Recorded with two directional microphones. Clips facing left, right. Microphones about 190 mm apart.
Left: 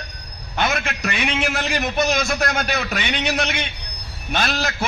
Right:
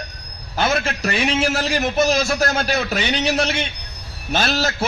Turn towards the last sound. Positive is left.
turn(degrees=-30)  # may be behind; listen again after turning